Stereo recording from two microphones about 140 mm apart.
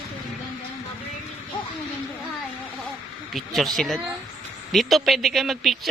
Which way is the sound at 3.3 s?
Centre (ahead or behind).